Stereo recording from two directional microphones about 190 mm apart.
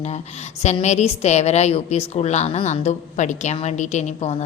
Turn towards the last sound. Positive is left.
turn(degrees=35)  # may be behind; listen again after turning